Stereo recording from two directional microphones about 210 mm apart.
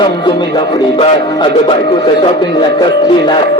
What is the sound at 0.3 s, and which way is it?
Music, 20° left (ahead or behind).